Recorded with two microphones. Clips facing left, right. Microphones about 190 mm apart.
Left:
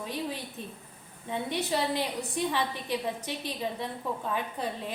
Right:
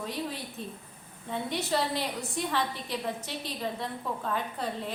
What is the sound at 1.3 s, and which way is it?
A woman's voice, 15° left (ahead or behind).